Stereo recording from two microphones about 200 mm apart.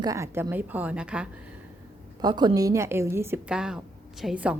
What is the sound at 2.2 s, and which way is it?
A woman's voice, 20° right (ahead or behind).